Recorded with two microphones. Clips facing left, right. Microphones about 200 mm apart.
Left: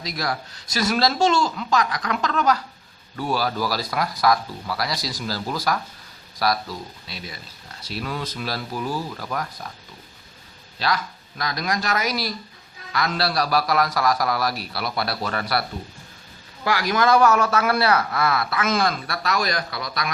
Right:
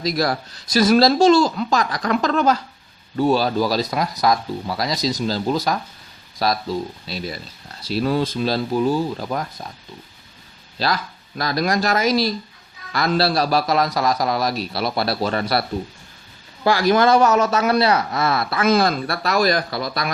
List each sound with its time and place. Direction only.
0.0 s a man's voice: 35° right (ahead or behind)
10.8 s a man's voice: 35° right (ahead or behind)
16.6 s a man's voice: 30° right (ahead or behind)